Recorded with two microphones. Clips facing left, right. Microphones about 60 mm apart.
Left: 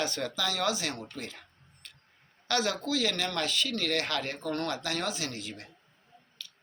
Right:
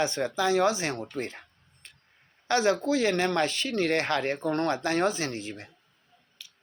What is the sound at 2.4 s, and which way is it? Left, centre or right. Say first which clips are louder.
Speech: right 6 dB; right.